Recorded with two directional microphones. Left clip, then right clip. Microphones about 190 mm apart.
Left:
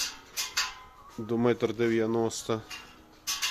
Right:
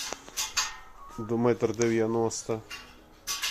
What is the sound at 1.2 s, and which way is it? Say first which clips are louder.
Speech: right 1 dB; 15° left (ahead or behind).